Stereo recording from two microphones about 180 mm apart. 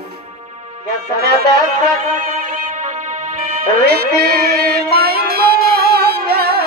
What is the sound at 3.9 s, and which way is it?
Music, 60° right (ahead or behind).